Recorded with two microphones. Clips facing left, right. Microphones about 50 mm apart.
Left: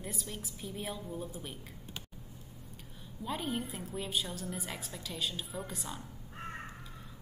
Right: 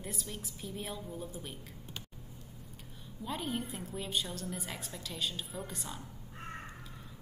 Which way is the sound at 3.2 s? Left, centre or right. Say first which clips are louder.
Left 1 dB; centre.